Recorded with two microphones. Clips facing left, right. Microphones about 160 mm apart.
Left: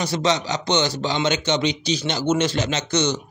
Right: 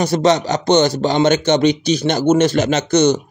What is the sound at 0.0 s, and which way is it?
A man's voice, 50° right (ahead or behind).